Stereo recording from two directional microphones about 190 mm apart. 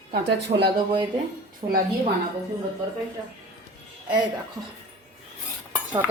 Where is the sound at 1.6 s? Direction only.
30° right (ahead or behind).